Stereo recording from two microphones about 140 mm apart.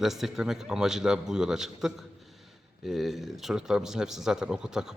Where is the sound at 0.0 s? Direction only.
Centre (ahead or behind).